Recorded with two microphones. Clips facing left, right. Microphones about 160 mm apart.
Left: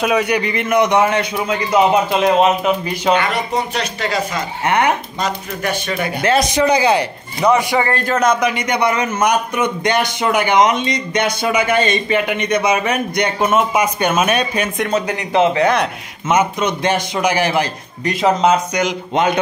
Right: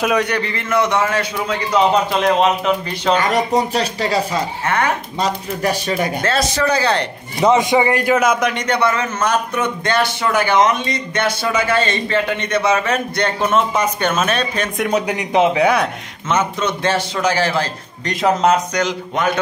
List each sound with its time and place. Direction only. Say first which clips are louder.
0.0 s a man's voice: left 1 dB; 5° left (ahead or behind)
3.2 s speech: right 3 dB; 40° right (ahead or behind)
4.6 s speech: left 4 dB; 20° left (ahead or behind)
5.2 s speech: right 5 dB; 30° right (ahead or behind)
6.2 s a man's voice: left 7 dB; 15° left (ahead or behind)
7.4 s a man's voice: right 1 dB; 20° right (ahead or behind); by 14.7 s 10° left (ahead or behind)
14.9 s a man's voice: even; 15° right (ahead or behind)
16.3 s a man's voice: left 3 dB; 15° left (ahead or behind)
18.2 s speech: left 1 dB; centre (ahead or behind)
18.8 s a man's voice: left 2 dB; 15° left (ahead or behind)